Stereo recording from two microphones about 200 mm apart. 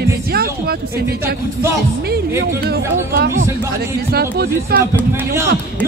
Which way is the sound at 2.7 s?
50° right (ahead or behind).